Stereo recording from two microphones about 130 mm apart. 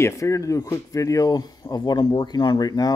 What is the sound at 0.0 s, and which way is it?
Speech, 25° left (ahead or behind).